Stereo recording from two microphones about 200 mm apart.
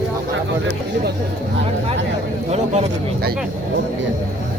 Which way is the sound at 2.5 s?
35° right (ahead or behind).